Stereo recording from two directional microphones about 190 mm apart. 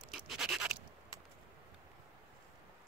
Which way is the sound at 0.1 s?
Centre (ahead or behind).